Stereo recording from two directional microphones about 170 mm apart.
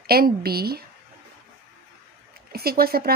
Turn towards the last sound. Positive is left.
turn(degrees=-65)  # may be behind; listen again after turning